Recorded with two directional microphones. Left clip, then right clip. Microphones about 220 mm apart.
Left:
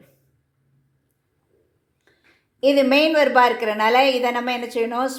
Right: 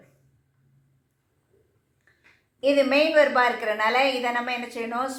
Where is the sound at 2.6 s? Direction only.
45° left (ahead or behind).